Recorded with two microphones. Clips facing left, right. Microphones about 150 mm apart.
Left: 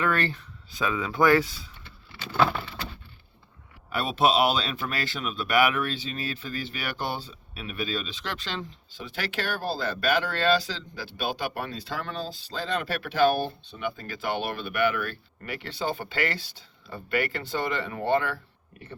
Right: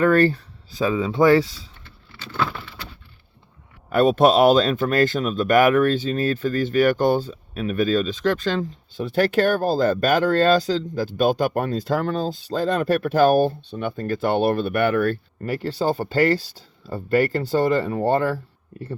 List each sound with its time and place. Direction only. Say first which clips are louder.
0.0 s speech: right 10 dB; 40° right (ahead or behind)
1.8 s vehicle: left 1 dB; 15° left (ahead or behind)
3.8 s speech: right 8 dB; 50° right (ahead or behind)